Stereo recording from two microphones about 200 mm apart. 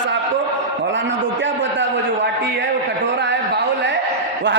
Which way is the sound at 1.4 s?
65° right (ahead or behind).